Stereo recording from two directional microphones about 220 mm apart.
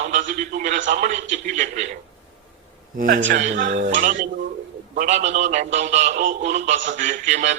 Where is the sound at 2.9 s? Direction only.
40° right (ahead or behind).